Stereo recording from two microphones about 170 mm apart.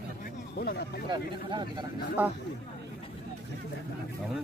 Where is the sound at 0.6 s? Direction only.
70° left (ahead or behind).